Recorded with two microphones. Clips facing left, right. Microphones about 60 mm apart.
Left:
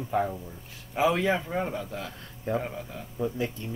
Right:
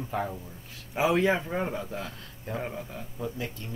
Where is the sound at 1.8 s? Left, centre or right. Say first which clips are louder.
Even; centre.